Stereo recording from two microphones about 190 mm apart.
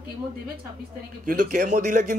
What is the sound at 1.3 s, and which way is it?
Speech, 45° right (ahead or behind).